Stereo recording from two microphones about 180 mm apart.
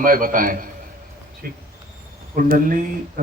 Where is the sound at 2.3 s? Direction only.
50° right (ahead or behind).